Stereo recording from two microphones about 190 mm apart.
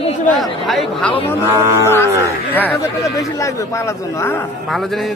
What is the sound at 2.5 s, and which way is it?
Speech, 15° left (ahead or behind).